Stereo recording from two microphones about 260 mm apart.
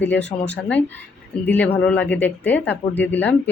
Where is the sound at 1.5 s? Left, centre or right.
Centre.